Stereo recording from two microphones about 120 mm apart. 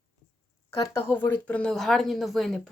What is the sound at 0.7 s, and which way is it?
A woman's voice, 20° left (ahead or behind).